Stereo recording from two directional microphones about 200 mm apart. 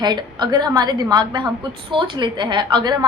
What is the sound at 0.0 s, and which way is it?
A woman's voice, 20° right (ahead or behind).